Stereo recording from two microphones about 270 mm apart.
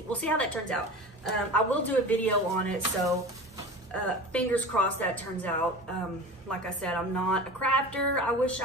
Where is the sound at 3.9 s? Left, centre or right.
Centre.